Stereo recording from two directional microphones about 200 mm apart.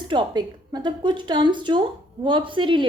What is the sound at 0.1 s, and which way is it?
A woman's voice, 20° right (ahead or behind).